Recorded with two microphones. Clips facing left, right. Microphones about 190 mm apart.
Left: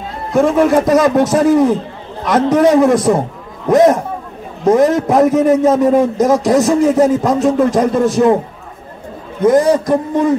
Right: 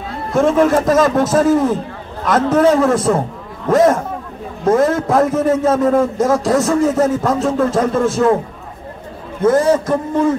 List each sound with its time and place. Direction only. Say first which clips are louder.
0.3 s a man's voice: left 2 dB; 10° left (ahead or behind)
9.4 s a man's voice: left 2 dB; 15° left (ahead or behind)